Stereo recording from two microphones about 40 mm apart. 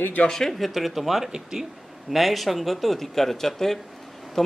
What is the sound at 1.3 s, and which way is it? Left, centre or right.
Speech, centre.